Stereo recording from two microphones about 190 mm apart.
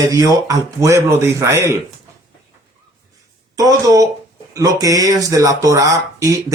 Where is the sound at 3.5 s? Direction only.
20° right (ahead or behind).